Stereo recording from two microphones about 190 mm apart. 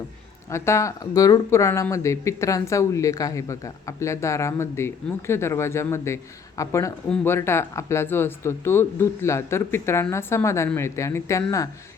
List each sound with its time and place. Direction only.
0.5 s speech: 15° left (ahead or behind)